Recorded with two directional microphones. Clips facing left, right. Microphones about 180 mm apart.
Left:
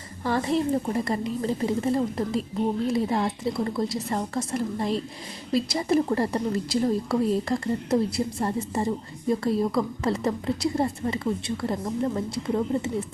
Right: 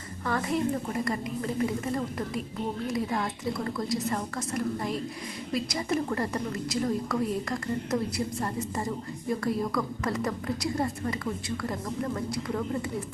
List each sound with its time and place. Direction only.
0.3 s a woman's voice: 30° left (ahead or behind)